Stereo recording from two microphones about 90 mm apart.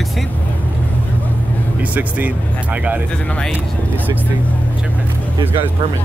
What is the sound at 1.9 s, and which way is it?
Speech, 20° right (ahead or behind).